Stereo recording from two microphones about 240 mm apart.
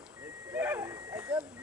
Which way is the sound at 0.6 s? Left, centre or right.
Centre.